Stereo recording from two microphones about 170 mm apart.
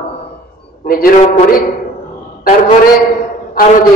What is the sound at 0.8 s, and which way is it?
Speech, 60° left (ahead or behind).